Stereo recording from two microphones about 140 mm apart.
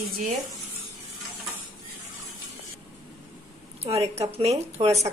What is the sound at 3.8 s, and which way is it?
A woman's voice, 45° right (ahead or behind).